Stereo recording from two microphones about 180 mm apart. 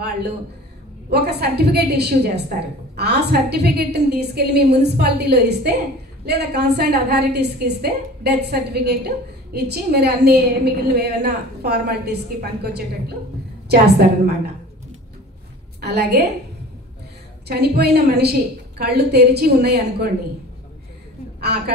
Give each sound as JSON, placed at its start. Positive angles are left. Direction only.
{"t": 1.1, "sound": "a woman's voice", "side_deg": -65}
{"t": 15.8, "sound": "a woman's voice", "side_deg": -65}
{"t": 17.5, "sound": "a woman's voice", "side_deg": -65}
{"t": 21.4, "sound": "a woman's voice", "side_deg": -65}